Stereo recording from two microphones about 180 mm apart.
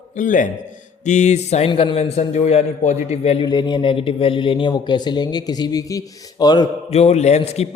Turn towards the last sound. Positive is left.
turn(degrees=35)  # may be behind; listen again after turning